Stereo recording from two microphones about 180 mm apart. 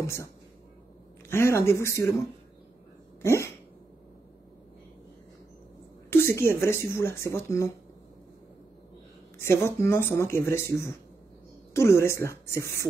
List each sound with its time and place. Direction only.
0.0 s speech: 15° left (ahead or behind)
1.3 s speech: 15° left (ahead or behind)
3.2 s speech: 15° left (ahead or behind)
6.3 s speech: 15° left (ahead or behind)
9.4 s speech: 15° left (ahead or behind)
11.7 s speech: 15° left (ahead or behind)